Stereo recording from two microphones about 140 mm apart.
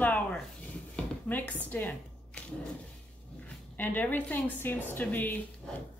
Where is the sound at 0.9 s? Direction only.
10° left (ahead or behind).